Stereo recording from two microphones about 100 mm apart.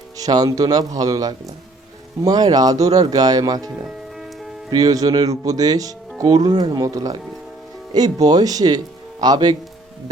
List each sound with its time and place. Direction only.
0.2 s speech: 40° right (ahead or behind)
4.7 s speech: 40° right (ahead or behind)